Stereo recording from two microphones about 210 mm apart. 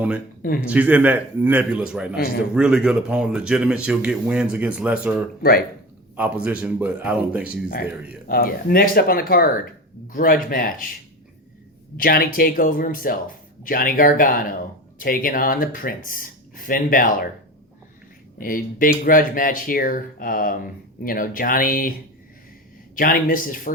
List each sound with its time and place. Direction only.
0.6 s a man's voice: 5° right (ahead or behind)
5.4 s speech: 50° left (ahead or behind)
6.1 s a man's voice: 5° right (ahead or behind)
8.3 s speech: 45° left (ahead or behind)
11.9 s speech: 45° left (ahead or behind)
18.3 s speech: 40° left (ahead or behind)
23.0 s speech: 40° left (ahead or behind)